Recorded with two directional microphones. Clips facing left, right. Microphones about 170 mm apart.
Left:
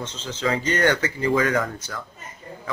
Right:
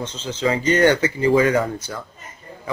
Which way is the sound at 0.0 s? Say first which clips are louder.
Right 4 dB; 15° right (ahead or behind).